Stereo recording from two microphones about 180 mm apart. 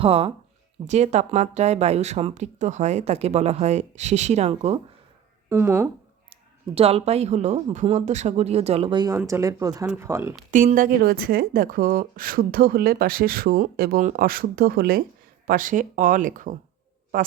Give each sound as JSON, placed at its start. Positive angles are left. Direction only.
{"t": 0.0, "sound": "speech", "side_deg": -30}
{"t": 5.5, "sound": "speech", "side_deg": -15}
{"t": 6.3, "sound": "speech", "side_deg": -35}
{"t": 10.5, "sound": "a woman's voice", "side_deg": -45}